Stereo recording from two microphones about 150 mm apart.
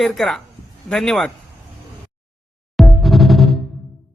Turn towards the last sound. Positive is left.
turn(degrees=0)  # may be behind; listen again after turning